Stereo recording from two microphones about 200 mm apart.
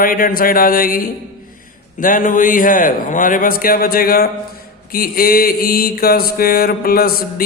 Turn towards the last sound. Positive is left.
turn(degrees=50)  # may be behind; listen again after turning